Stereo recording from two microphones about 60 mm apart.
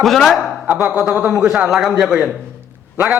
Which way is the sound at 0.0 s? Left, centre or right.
Centre.